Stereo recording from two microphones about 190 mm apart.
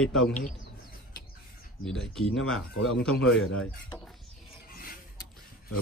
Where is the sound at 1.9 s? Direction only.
Centre (ahead or behind).